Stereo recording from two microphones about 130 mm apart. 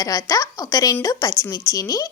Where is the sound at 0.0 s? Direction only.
30° left (ahead or behind).